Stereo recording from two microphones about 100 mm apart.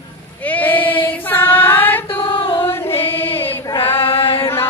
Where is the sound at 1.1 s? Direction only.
20° left (ahead or behind).